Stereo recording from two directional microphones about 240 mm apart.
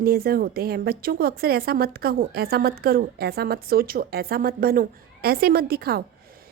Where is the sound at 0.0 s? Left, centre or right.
Right.